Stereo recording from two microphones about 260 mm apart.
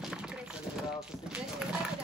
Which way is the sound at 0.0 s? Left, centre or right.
Centre.